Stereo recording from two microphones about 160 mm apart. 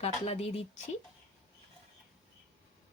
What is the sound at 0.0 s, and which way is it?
Speech, 40° left (ahead or behind).